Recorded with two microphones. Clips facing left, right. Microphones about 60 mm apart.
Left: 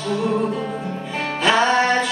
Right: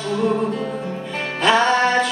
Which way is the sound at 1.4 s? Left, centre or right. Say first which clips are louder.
Right 1 dB; centre.